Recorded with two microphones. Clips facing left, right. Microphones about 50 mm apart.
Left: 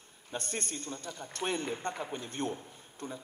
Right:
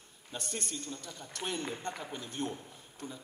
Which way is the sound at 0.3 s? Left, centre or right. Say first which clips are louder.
Left 2 dB; left.